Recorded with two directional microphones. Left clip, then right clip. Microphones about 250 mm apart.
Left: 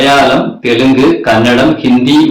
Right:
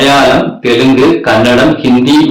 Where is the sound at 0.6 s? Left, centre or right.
Centre.